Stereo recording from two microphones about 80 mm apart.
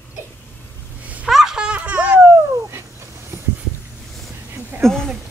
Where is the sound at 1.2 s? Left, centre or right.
Centre.